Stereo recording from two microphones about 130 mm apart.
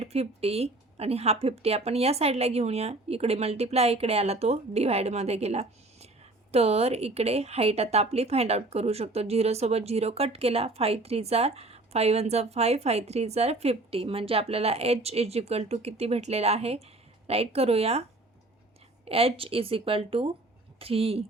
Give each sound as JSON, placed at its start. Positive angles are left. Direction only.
{"t": 0.0, "sound": "a woman's voice", "side_deg": -55}
{"t": 19.0, "sound": "a woman's voice", "side_deg": -45}